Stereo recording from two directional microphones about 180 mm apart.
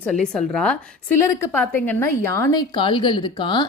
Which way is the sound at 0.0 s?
5° left (ahead or behind).